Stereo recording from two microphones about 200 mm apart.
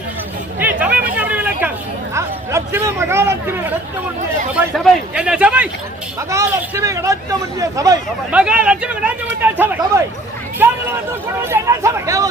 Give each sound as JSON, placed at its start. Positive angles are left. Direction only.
{"t": 0.6, "sound": "hubbub", "side_deg": -10}
{"t": 1.1, "sound": "a sound", "side_deg": -10}
{"t": 2.1, "sound": "a man's voice", "side_deg": -15}
{"t": 8.3, "sound": "a man's voice", "side_deg": -5}
{"t": 10.6, "sound": "a sound", "side_deg": -10}
{"t": 11.4, "sound": "speech", "side_deg": -15}